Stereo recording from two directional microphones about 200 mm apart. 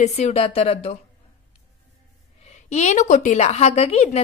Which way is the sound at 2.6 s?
35° left (ahead or behind).